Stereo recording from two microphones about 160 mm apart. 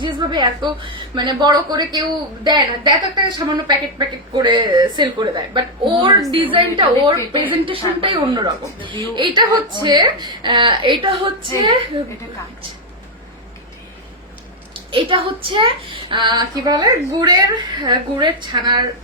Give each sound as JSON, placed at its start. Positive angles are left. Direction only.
{"t": 0.0, "sound": "a woman's voice", "side_deg": -30}
{"t": 14.7, "sound": "a woman's voice", "side_deg": -35}